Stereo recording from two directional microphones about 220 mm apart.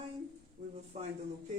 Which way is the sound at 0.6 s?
30° right (ahead or behind).